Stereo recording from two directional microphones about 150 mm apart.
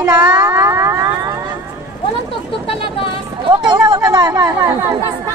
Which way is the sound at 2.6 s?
35° left (ahead or behind).